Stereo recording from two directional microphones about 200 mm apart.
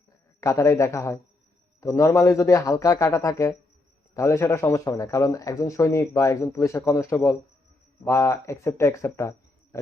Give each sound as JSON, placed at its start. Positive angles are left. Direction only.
{"t": 0.3, "sound": "speech", "side_deg": 15}